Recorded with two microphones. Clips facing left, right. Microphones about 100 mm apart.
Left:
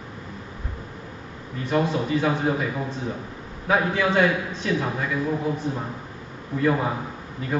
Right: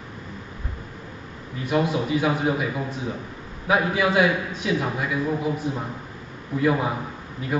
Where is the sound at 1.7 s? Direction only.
10° right (ahead or behind).